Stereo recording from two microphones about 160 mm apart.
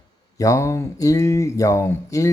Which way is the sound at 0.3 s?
20° left (ahead or behind).